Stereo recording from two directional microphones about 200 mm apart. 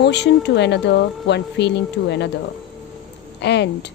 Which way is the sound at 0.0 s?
60° left (ahead or behind).